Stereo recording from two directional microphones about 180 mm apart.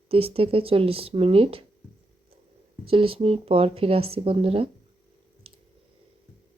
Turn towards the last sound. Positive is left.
turn(degrees=-30)  # may be behind; listen again after turning